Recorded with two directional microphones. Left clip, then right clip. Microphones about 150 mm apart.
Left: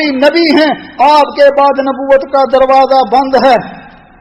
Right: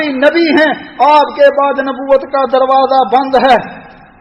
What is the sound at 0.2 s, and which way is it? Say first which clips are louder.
Speech: even; 35° left (ahead or behind).